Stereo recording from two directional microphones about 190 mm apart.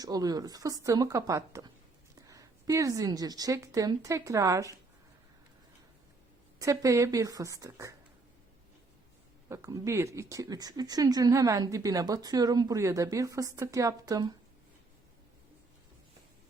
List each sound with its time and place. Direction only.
0.0 s a woman's voice: 20° right (ahead or behind)
6.6 s speech: 15° right (ahead or behind)
9.5 s speech: 15° right (ahead or behind)